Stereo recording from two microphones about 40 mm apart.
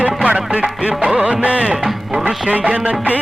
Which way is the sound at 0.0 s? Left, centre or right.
Right.